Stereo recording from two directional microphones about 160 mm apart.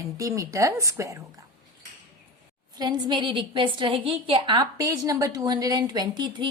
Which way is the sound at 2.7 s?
30° right (ahead or behind).